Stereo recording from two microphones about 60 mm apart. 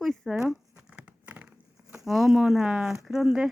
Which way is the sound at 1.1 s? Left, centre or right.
Right.